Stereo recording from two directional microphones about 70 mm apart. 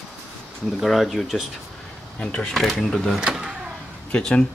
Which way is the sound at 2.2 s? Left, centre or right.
Centre.